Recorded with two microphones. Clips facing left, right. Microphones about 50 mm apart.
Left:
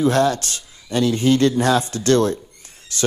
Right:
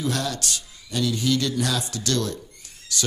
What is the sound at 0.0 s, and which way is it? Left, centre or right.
A man's voice, left.